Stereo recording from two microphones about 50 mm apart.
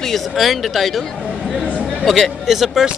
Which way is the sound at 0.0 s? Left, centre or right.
Centre.